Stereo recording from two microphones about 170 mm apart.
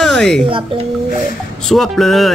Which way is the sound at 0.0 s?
5° left (ahead or behind).